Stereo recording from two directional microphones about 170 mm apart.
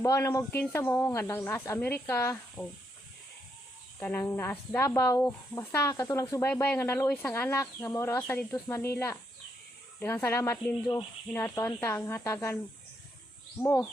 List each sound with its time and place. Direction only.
0.0 s speech: 15° left (ahead or behind)
4.0 s speech: 10° left (ahead or behind)
13.6 s speech: 15° left (ahead or behind)